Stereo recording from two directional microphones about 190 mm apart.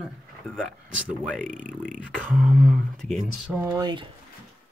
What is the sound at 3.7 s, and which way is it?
Speech, 25° right (ahead or behind).